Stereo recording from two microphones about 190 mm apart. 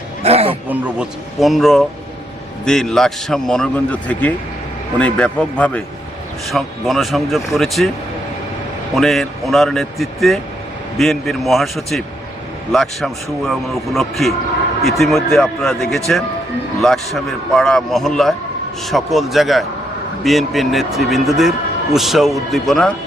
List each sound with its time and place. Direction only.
0.2 s wild animals: 30° right (ahead or behind)
0.7 s a man's voice: 5° right (ahead or behind)
9.0 s a man's voice: centre (ahead or behind)